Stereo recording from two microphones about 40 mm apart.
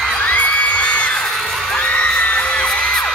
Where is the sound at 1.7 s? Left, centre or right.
Left.